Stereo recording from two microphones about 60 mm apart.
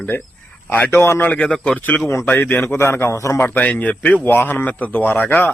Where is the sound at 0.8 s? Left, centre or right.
Left.